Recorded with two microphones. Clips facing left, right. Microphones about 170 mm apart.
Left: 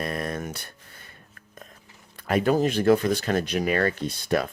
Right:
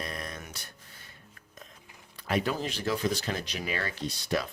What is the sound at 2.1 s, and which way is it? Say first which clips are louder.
Speech: left 8 dB; 50° left (ahead or behind).